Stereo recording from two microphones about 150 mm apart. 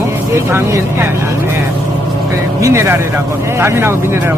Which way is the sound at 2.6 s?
20° right (ahead or behind).